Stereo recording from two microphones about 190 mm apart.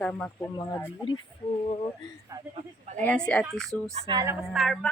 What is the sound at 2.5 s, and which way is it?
Speech, 35° right (ahead or behind).